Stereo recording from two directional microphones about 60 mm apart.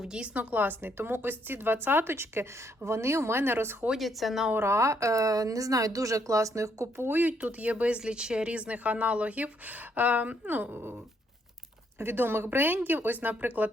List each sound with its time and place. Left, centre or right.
0.0 s a woman's voice: centre
0.3 s a woman's voice: right
3.9 s speech: centre
4.5 s speech: right
6.9 s a woman's voice: right
7.2 s speech: right
11.9 s a woman's voice: right